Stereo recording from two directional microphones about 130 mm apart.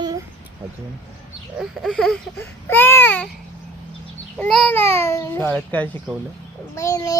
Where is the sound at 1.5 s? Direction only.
Centre (ahead or behind).